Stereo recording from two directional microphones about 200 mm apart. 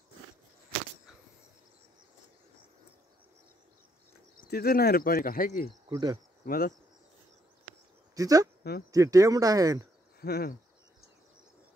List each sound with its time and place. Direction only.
4.4 s speech: 50° left (ahead or behind)
5.9 s speech: 20° right (ahead or behind)
6.4 s speech: 45° left (ahead or behind)
8.1 s speech: 15° right (ahead or behind)
10.2 s speech: 50° left (ahead or behind)